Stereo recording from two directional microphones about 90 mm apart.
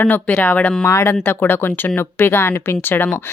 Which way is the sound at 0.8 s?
30° left (ahead or behind).